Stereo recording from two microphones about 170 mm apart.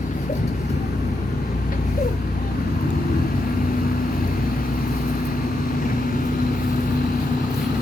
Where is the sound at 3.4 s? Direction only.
55° left (ahead or behind).